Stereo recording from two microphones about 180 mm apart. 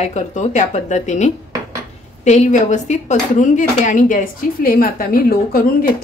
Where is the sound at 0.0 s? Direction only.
40° left (ahead or behind).